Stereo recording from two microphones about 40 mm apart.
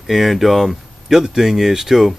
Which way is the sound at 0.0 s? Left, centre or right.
Centre.